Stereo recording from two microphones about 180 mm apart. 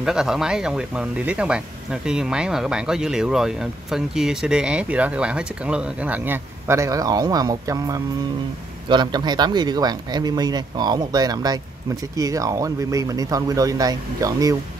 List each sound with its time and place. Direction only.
0.0 s speech: 5° right (ahead or behind); by 14.6 s 20° right (ahead or behind)